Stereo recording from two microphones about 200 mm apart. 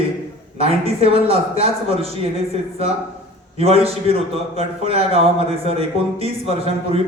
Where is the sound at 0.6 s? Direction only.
30° right (ahead or behind).